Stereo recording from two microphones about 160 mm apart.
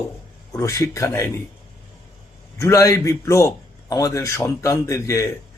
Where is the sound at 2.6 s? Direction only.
20° left (ahead or behind).